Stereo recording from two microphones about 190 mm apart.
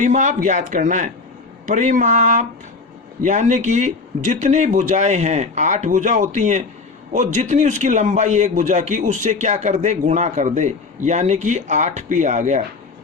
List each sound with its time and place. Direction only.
0.0 s a man's voice: 40° right (ahead or behind)